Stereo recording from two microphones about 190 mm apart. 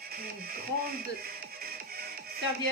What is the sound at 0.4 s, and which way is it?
Music, 50° right (ahead or behind).